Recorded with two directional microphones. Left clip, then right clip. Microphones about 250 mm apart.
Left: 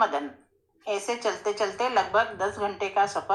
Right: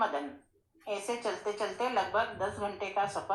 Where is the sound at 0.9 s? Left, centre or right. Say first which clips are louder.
Left 6 dB; left.